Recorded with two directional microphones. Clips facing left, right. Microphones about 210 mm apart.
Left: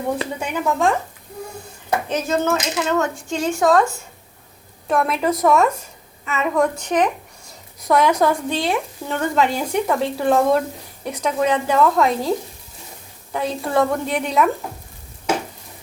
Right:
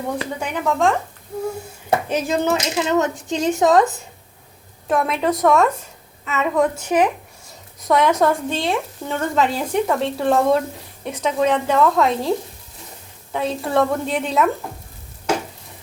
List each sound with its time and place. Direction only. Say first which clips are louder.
0.3 s speech: even; 5° left (ahead or behind)
2.0 s speech: left 1 dB; 15° right (ahead or behind)
4.9 s speech: even; centre (ahead or behind)
13.3 s speech: even; centre (ahead or behind)